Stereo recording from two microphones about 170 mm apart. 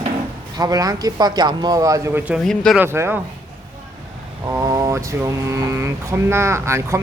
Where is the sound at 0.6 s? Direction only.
20° right (ahead or behind).